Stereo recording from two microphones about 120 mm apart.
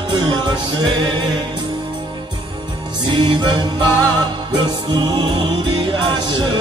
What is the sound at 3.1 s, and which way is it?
Music, 40° right (ahead or behind).